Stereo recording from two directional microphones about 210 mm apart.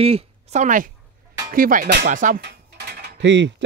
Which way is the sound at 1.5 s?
40° right (ahead or behind).